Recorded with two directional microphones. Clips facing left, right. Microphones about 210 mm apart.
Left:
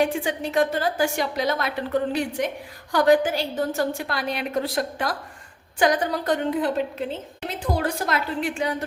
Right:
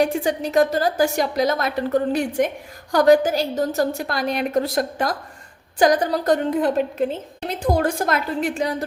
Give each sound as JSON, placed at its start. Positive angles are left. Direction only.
{"t": 0.0, "sound": "a woman's voice", "side_deg": -40}